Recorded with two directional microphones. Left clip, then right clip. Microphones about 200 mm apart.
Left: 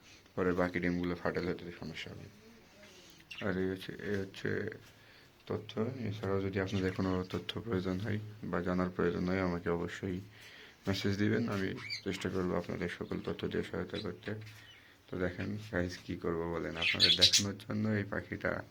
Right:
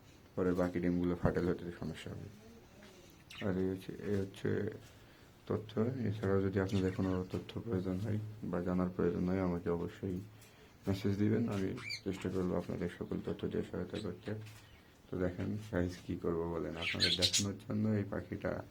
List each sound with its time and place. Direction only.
0.3 s speech: 5° left (ahead or behind); by 2.0 s 25° right (ahead or behind)
3.5 s speech: 5° right (ahead or behind)
6.9 s speech: 10° left (ahead or behind)
15.1 s speech: 5° right (ahead or behind)
16.2 s speech: centre (ahead or behind)
17.4 s speech: centre (ahead or behind)